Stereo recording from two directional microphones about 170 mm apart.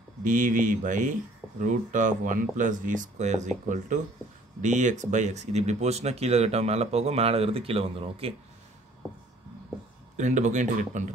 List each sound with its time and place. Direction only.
0.2 s speech: 50° right (ahead or behind); by 8.4 s 35° right (ahead or behind)
10.1 s speech: 45° right (ahead or behind)